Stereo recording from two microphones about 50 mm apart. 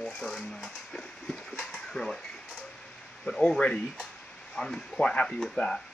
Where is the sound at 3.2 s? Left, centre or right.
Centre.